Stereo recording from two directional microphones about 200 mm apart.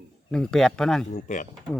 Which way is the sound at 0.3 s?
5° left (ahead or behind).